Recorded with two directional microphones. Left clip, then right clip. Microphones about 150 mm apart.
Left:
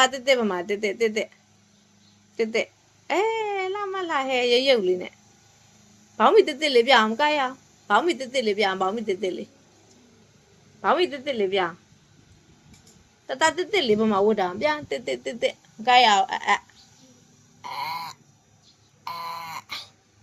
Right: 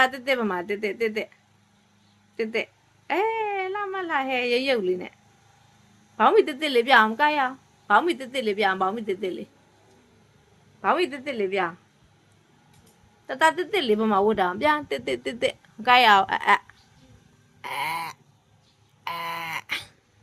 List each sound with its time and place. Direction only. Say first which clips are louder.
0.0 s a woman's voice: left 2 dB; 30° right (ahead or behind)
2.3 s speech: left 3 dB; 30° right (ahead or behind)
6.1 s a woman's voice: left 1 dB; 30° right (ahead or behind)
10.8 s a woman's voice: left 1 dB; 35° right (ahead or behind)
13.2 s speech: right 1 dB; 30° right (ahead or behind); by 16.6 s 60° right (ahead or behind)
17.6 s a sound: right 2 dB; 90° right